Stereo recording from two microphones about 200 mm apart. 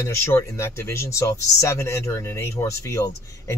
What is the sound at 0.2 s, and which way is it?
Speech, 15° left (ahead or behind).